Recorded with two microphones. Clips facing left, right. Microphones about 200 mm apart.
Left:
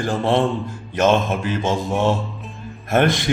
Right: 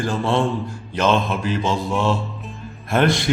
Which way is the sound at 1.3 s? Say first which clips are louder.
Left 1 dB; 50° left (ahead or behind).